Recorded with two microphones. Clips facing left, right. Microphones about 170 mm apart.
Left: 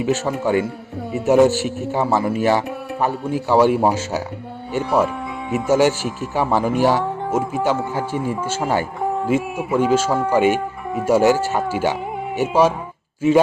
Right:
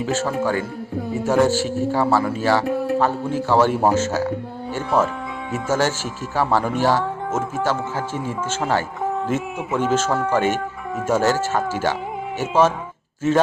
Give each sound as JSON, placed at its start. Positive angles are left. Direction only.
{"t": 0.0, "sound": "speech", "side_deg": 15}